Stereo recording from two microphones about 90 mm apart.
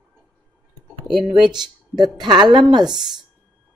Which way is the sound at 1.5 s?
55° right (ahead or behind).